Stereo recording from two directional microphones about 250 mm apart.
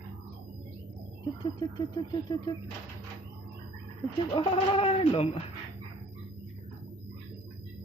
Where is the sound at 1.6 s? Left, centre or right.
Centre.